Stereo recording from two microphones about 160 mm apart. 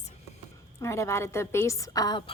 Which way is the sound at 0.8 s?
15° left (ahead or behind).